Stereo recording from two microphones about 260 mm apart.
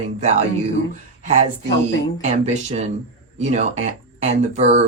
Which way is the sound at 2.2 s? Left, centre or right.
Right.